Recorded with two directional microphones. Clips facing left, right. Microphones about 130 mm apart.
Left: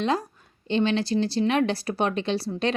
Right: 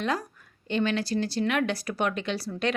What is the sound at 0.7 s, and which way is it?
Speech, 25° left (ahead or behind).